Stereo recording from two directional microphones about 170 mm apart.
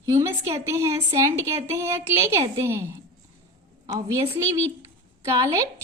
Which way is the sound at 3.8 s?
20° right (ahead or behind).